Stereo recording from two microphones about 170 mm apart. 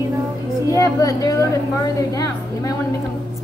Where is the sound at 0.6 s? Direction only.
20° left (ahead or behind).